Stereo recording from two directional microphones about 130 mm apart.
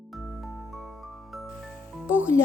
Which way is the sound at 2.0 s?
10° right (ahead or behind).